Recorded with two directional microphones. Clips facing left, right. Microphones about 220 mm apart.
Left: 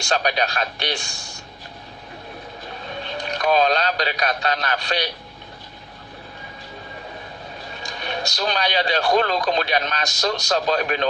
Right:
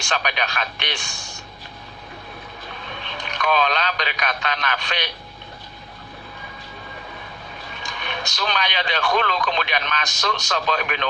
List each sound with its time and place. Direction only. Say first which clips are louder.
0.0 s speech: left 4 dB; 35° left (ahead or behind)
3.0 s speech: left 3 dB; 40° left (ahead or behind)
7.7 s speech: left 3 dB; 40° left (ahead or behind)